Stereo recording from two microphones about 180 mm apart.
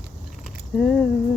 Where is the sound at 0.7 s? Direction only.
Centre (ahead or behind).